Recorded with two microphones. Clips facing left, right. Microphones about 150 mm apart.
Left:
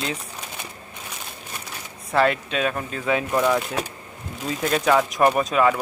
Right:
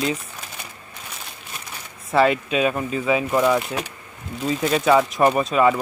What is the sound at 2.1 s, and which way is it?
Speech, centre (ahead or behind).